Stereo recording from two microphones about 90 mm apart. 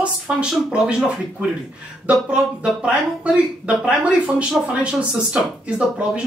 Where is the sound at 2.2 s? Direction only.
10° right (ahead or behind).